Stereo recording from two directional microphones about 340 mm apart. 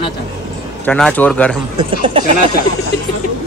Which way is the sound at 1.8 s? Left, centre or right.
Centre.